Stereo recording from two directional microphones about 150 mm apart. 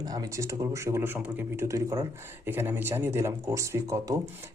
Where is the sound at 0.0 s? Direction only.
25° right (ahead or behind).